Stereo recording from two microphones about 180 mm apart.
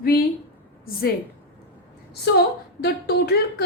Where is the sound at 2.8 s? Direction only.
60° left (ahead or behind).